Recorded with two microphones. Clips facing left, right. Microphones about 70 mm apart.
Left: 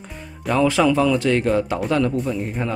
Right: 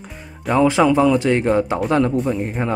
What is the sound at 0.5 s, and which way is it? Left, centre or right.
Speech, right.